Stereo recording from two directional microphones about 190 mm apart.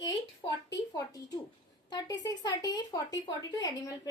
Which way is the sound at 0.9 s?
20° left (ahead or behind).